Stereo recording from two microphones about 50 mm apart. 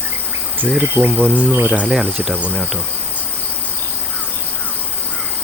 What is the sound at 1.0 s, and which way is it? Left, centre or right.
Insect, left.